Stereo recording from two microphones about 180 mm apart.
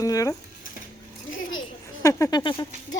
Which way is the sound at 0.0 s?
20° left (ahead or behind).